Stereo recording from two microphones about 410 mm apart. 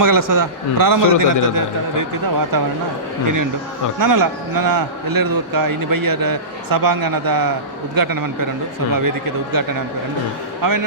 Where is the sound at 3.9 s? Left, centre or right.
Right.